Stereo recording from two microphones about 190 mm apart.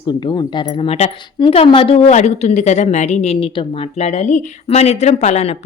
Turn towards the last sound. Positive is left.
turn(degrees=35)  # may be behind; listen again after turning